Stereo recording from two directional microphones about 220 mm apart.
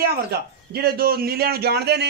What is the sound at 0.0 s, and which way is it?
A man's voice, 45° right (ahead or behind).